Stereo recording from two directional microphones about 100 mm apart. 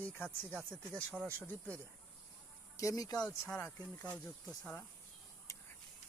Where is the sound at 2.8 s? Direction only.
35° left (ahead or behind).